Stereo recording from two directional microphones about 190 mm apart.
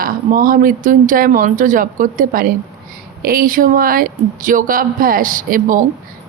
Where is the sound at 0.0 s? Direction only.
45° right (ahead or behind).